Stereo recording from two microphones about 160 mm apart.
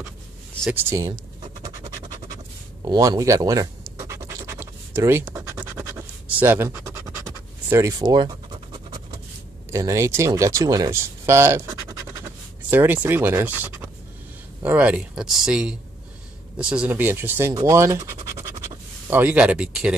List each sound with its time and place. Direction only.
0.7 s speech: 15° right (ahead or behind)
1.6 s scratch: 20° right (ahead or behind)
2.8 s speech: 20° right (ahead or behind)
4.0 s scratch: 20° right (ahead or behind)
9.7 s speech: 15° right (ahead or behind)